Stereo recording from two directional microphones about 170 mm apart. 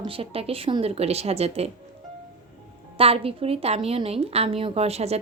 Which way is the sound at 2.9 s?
35° right (ahead or behind).